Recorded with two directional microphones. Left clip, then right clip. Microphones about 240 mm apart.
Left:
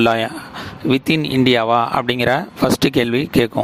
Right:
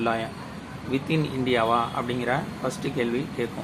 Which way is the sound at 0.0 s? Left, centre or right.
Left.